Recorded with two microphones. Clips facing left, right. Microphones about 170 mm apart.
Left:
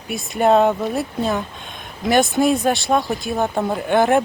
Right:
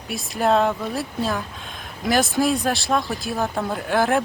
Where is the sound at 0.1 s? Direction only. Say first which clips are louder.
Left 4 dB; centre (ahead or behind).